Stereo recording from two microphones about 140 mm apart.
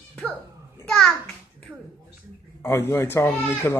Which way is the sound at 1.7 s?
10° right (ahead or behind).